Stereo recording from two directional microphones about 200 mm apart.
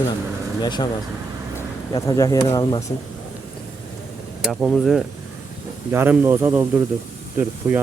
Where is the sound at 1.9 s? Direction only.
15° left (ahead or behind).